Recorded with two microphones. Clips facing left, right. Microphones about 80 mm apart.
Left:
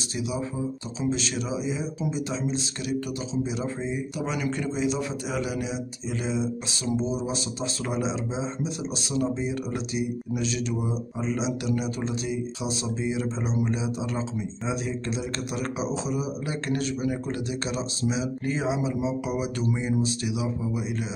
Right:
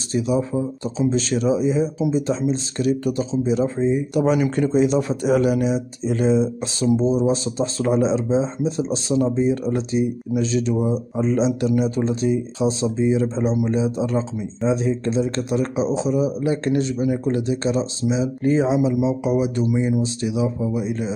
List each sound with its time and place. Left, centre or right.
0.1 s a man's voice: right